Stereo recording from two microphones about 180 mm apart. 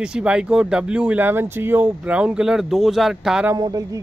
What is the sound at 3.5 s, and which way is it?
Speech, 20° right (ahead or behind).